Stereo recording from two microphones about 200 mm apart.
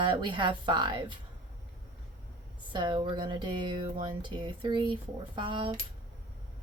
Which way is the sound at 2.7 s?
25° right (ahead or behind).